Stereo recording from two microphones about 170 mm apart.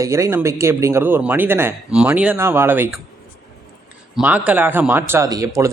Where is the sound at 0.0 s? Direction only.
15° right (ahead or behind).